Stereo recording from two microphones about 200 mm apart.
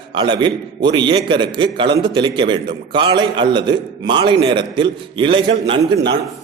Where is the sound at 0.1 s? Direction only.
25° right (ahead or behind).